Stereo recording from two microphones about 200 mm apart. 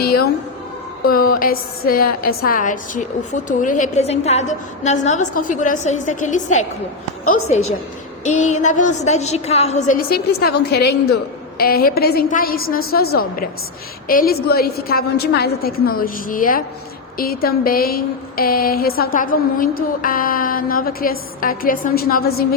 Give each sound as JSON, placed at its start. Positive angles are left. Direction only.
{"t": 0.0, "sound": "a sound", "side_deg": 50}
{"t": 1.0, "sound": "a woman's voice", "side_deg": 50}
{"t": 8.2, "sound": "a woman's voice", "side_deg": 35}